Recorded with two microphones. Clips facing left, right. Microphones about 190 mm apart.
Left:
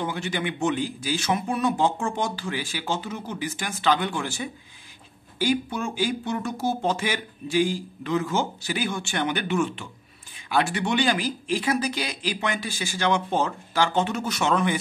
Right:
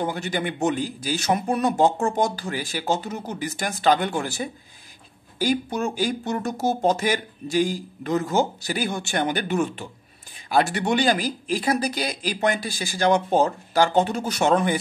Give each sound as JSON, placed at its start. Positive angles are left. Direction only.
{"t": 0.0, "sound": "speech", "side_deg": -40}